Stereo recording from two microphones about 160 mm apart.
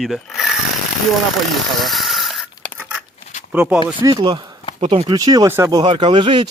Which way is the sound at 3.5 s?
10° right (ahead or behind).